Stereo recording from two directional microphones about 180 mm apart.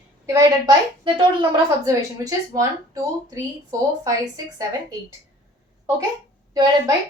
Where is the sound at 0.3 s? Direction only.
25° right (ahead or behind).